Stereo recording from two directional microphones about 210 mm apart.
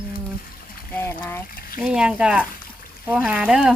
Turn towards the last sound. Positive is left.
turn(degrees=-5)  # may be behind; listen again after turning